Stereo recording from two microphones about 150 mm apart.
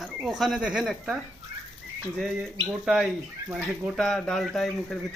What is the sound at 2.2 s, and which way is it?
Speech, 5° right (ahead or behind).